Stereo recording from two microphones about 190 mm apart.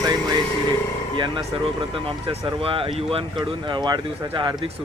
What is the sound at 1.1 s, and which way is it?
Speech, 25° right (ahead or behind).